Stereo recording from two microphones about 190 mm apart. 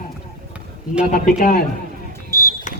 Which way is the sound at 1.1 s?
45° left (ahead or behind).